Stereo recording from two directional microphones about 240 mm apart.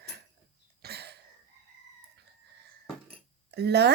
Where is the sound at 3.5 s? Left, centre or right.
Right.